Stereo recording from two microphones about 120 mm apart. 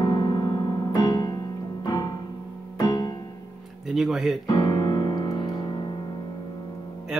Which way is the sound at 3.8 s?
Centre (ahead or behind).